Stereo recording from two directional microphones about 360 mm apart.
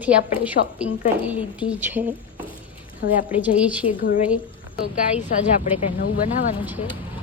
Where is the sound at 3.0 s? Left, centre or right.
Left.